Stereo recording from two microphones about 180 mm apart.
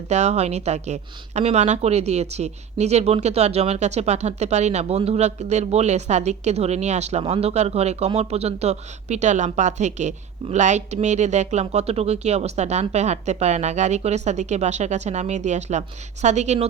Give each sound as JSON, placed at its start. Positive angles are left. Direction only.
{"t": 0.1, "sound": "speech", "side_deg": -40}